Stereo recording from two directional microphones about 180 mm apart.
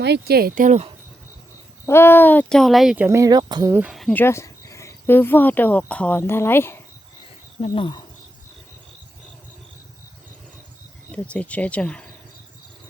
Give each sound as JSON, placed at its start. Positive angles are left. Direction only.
{"t": 0.0, "sound": "speech", "side_deg": -65}
{"t": 1.9, "sound": "speech", "side_deg": 15}
{"t": 3.8, "sound": "speech", "side_deg": -5}
{"t": 7.6, "sound": "speech", "side_deg": 25}
{"t": 11.1, "sound": "speech", "side_deg": 5}